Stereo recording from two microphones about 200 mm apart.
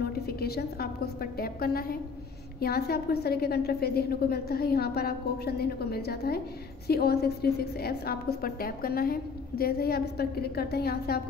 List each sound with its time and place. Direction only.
0.0 s a woman's voice: 50° left (ahead or behind)